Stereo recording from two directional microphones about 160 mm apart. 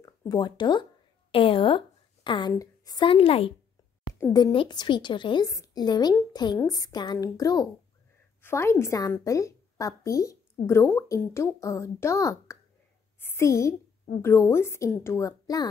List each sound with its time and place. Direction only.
0.0 s a woman's voice: 20° left (ahead or behind); by 3.5 s 35° left (ahead or behind)
4.1 s a woman's voice: 25° left (ahead or behind)